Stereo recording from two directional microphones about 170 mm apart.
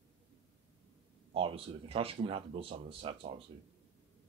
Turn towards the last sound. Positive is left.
turn(degrees=-35)  # may be behind; listen again after turning